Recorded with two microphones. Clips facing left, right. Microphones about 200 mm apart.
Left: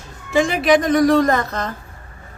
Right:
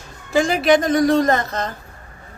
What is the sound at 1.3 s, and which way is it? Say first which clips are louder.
Speech: even; 25° right (ahead or behind).